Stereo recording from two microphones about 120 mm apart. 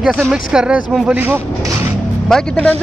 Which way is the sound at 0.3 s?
5° right (ahead or behind).